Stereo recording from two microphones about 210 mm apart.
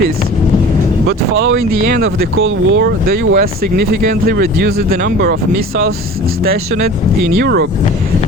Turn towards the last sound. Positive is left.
turn(degrees=-50)  # may be behind; listen again after turning